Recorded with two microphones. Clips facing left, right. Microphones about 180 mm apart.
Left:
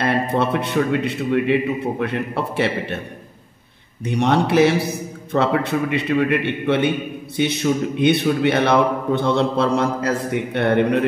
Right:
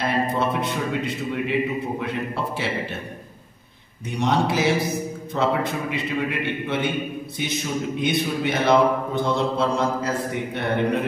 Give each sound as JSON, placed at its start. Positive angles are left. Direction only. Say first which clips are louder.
{"t": 0.0, "sound": "a man's voice", "louder": "left 3 dB", "side_deg": 60}
{"t": 4.2, "sound": "a man's voice", "louder": "left 6 dB", "side_deg": 60}